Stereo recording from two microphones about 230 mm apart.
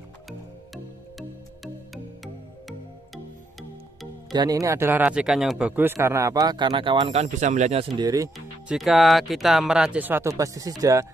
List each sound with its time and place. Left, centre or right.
4.3 s speech: centre
8.0 s speech: centre
8.6 s speech: centre